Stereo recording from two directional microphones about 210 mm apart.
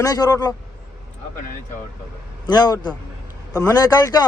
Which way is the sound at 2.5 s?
20° left (ahead or behind).